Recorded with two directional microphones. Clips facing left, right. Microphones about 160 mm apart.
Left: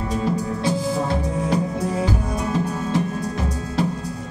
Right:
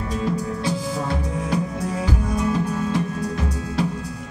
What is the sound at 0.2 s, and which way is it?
Music, 30° left (ahead or behind).